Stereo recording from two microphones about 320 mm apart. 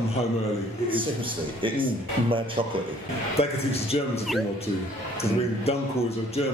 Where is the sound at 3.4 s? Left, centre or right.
Centre.